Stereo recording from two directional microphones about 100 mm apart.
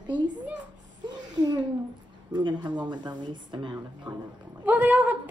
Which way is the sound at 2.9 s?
50° right (ahead or behind).